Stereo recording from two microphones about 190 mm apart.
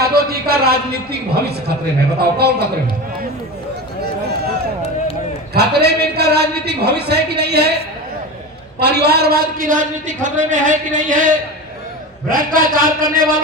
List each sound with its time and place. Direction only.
0.0 s a man's voice: 55° right (ahead or behind)
5.5 s a man's voice: 60° right (ahead or behind)
8.8 s a man's voice: 60° right (ahead or behind)